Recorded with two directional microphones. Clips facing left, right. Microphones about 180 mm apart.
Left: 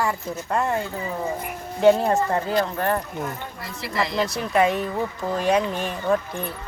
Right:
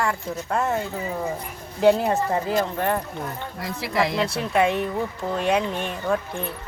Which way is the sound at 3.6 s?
75° right (ahead or behind).